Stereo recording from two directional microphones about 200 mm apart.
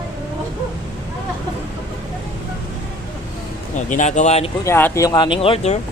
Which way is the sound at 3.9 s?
40° left (ahead or behind).